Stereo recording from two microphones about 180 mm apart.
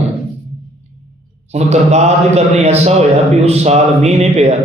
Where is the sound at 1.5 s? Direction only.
40° right (ahead or behind).